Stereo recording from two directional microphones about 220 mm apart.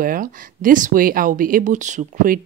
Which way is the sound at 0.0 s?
40° right (ahead or behind).